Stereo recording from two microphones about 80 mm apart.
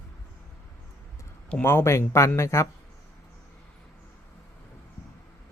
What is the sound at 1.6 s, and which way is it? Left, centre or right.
Speech, left.